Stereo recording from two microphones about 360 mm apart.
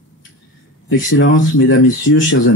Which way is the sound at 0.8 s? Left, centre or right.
Left.